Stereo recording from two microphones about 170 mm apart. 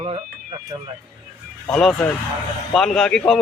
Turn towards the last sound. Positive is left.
turn(degrees=5)  # may be behind; listen again after turning